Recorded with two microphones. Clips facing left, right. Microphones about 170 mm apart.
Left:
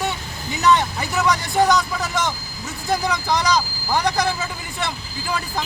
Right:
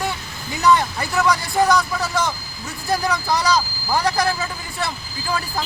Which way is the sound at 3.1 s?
20° left (ahead or behind).